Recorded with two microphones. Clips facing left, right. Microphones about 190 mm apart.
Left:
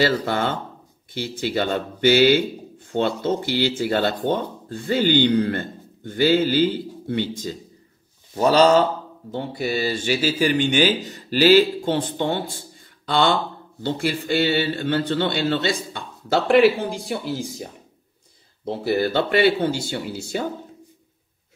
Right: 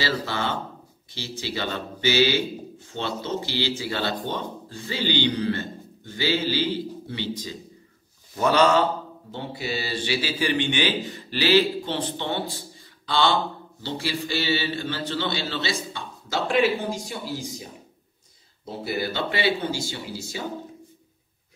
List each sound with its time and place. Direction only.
0.2 s speech: 50° left (ahead or behind)
8.4 s speech: 35° left (ahead or behind)
9.3 s a man's voice: 50° left (ahead or behind)
18.9 s a man's voice: 55° left (ahead or behind)